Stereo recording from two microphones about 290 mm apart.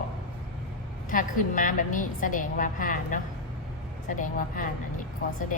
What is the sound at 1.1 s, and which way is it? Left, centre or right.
A woman's voice, left.